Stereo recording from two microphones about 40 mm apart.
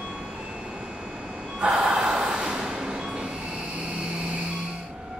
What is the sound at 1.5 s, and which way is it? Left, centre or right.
Gasp, right.